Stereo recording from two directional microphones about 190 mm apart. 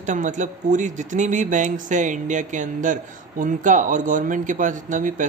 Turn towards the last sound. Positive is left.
turn(degrees=-40)  # may be behind; listen again after turning